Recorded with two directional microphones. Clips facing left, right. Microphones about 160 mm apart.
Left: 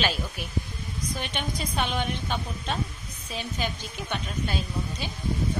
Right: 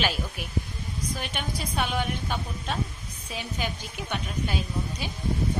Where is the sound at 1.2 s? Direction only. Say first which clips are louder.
Left 1 dB; 5° right (ahead or behind).